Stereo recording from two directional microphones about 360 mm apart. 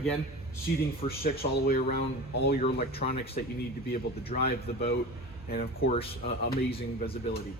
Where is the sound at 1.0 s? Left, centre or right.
Left.